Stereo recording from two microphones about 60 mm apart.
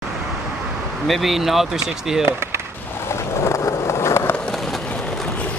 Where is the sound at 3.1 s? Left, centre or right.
Left.